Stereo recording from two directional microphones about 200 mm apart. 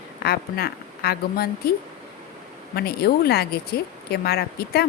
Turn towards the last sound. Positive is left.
turn(degrees=50)  # may be behind; listen again after turning